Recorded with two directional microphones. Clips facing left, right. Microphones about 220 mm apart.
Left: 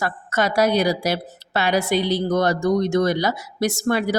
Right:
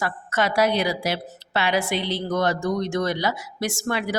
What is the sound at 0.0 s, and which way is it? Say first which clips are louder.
A woman's voice: left 2 dB; 40° left (ahead or behind).